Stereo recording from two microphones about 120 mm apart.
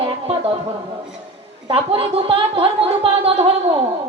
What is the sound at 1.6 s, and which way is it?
Speech, 50° right (ahead or behind).